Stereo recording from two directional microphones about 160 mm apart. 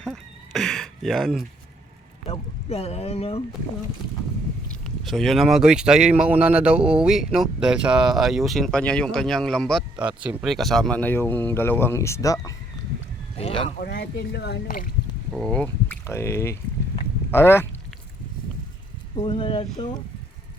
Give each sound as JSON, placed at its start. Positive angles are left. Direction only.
{"t": 0.0, "sound": "a sound", "side_deg": 0}
{"t": 2.2, "sound": "speech", "side_deg": 40}
{"t": 4.8, "sound": "speech", "side_deg": 0}
{"t": 10.0, "sound": "speech", "side_deg": -10}
{"t": 13.3, "sound": "speech", "side_deg": 35}
{"t": 13.8, "sound": "speech", "side_deg": 80}
{"t": 15.3, "sound": "speech", "side_deg": 0}
{"t": 19.1, "sound": "speech", "side_deg": 35}